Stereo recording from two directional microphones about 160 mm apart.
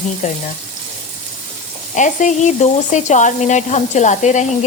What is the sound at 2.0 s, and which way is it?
Speech, 50° left (ahead or behind).